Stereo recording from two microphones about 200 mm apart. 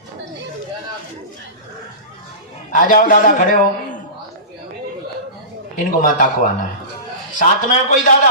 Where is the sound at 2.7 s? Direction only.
45° left (ahead or behind).